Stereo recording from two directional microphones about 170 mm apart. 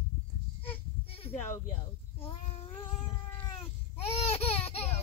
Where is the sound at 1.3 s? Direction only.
15° left (ahead or behind).